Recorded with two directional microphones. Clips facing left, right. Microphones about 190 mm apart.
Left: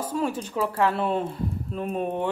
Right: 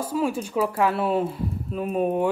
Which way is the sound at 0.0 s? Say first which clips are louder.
Right 2 dB; 10° right (ahead or behind).